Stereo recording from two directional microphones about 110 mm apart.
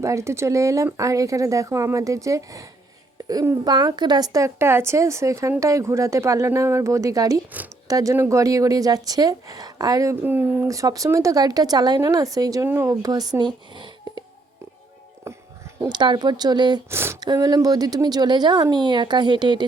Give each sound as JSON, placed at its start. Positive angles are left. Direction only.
{"t": 0.0, "sound": "speech", "side_deg": -25}
{"t": 10.2, "sound": "speech", "side_deg": -15}
{"t": 10.7, "sound": "speech", "side_deg": -30}
{"t": 15.8, "sound": "speech", "side_deg": -45}
{"t": 16.9, "sound": "speech", "side_deg": -25}
{"t": 17.2, "sound": "speech", "side_deg": -35}